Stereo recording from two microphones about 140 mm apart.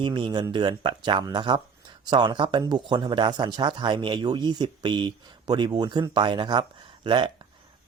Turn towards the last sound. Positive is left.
turn(degrees=-35)  # may be behind; listen again after turning